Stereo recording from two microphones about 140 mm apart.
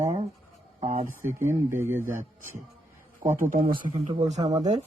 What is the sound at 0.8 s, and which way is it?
Speech, 60° right (ahead or behind).